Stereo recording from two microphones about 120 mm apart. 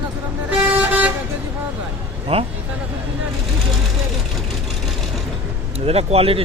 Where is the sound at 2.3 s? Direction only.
55° right (ahead or behind).